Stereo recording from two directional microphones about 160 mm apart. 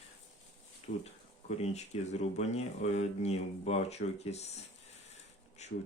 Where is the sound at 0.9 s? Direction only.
70° left (ahead or behind).